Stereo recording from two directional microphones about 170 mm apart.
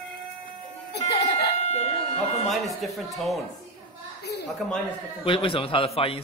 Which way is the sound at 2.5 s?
Centre (ahead or behind).